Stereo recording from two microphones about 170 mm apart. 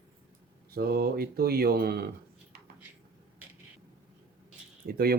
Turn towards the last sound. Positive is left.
turn(degrees=-60)  # may be behind; listen again after turning